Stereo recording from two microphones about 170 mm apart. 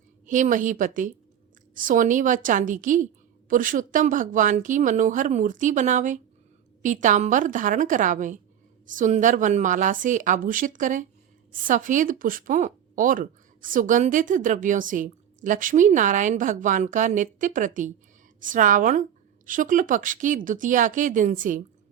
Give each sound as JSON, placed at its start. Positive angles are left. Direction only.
{"t": 0.3, "sound": "speech", "side_deg": -50}